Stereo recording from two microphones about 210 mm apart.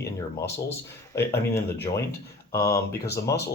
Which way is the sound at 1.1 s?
10° left (ahead or behind).